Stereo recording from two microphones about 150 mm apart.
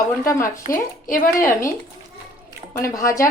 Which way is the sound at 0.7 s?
65° left (ahead or behind).